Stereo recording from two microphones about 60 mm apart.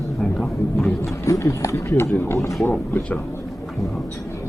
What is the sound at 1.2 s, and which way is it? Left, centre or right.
Speech, left.